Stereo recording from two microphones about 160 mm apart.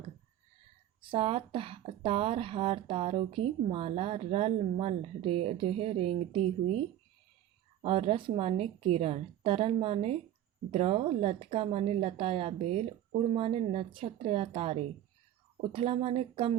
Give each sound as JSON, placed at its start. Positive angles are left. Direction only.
{"t": 1.0, "sound": "a woman's voice", "side_deg": -35}